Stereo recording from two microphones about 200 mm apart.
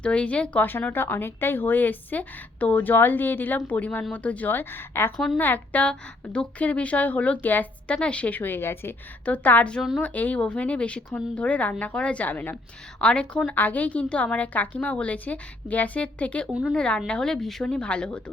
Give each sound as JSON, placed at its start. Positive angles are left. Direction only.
{"t": 0.0, "sound": "a woman's voice", "side_deg": 5}
{"t": 5.1, "sound": "a woman's voice", "side_deg": 0}
{"t": 16.5, "sound": "a woman's voice", "side_deg": -5}